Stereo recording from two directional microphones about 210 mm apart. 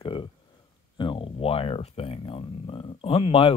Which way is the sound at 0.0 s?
25° left (ahead or behind).